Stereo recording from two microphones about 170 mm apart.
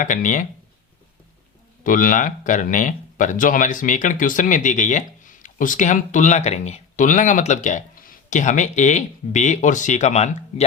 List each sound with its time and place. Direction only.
0.0 s speech: 50° left (ahead or behind)
1.8 s speech: 55° left (ahead or behind)